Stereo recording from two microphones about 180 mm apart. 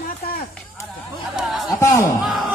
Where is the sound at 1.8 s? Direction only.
15° left (ahead or behind).